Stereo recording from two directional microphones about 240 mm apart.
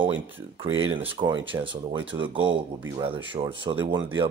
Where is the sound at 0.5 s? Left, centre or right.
Right.